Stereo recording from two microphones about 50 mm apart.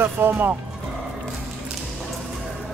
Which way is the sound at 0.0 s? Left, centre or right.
Right.